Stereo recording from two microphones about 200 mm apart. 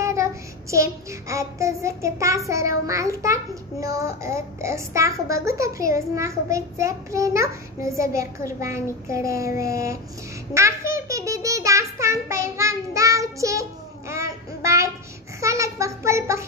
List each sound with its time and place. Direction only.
0.0 s child singing: 15° right (ahead or behind)
3.8 s a child's voice: 15° right (ahead or behind)
10.9 s child singing: 15° right (ahead or behind)
15.4 s a sound: 15° right (ahead or behind)